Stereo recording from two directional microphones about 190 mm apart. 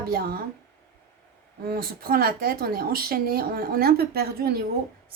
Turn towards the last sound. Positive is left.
turn(degrees=-55)  # may be behind; listen again after turning